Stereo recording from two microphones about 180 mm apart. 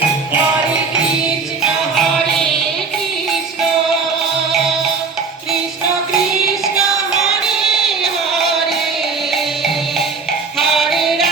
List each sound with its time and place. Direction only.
2.0 s music: centre (ahead or behind)
10.6 s music: centre (ahead or behind)